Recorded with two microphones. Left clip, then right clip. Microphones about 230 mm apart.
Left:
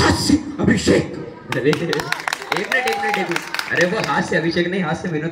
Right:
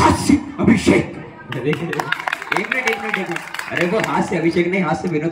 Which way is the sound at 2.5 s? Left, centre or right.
Right.